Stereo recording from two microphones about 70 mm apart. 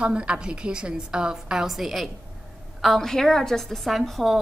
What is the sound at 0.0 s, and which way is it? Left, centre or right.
A woman's voice, centre.